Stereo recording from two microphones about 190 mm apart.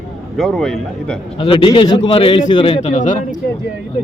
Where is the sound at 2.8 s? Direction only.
40° left (ahead or behind).